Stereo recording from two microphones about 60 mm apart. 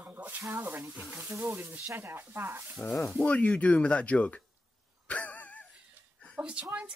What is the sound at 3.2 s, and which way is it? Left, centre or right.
Speech, left.